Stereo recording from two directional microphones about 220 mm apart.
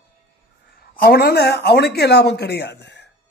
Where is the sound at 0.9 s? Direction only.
45° left (ahead or behind).